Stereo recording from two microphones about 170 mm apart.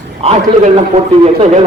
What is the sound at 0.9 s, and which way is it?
Speech, 40° right (ahead or behind).